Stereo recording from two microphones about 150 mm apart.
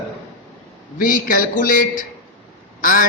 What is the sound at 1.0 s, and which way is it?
A man's voice, 65° left (ahead or behind).